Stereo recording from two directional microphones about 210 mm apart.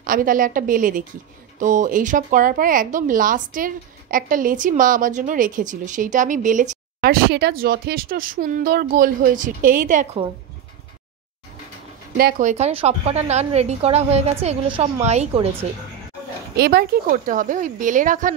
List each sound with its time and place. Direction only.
0.0 s a woman's voice: 40° right (ahead or behind)
12.2 s a woman's voice: 40° right (ahead or behind)
16.5 s a woman's voice: 45° right (ahead or behind)